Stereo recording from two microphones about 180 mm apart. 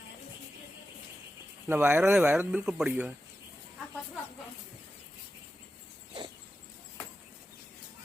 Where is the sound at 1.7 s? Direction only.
10° right (ahead or behind).